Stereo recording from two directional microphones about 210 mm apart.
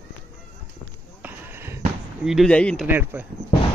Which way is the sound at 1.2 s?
10° right (ahead or behind).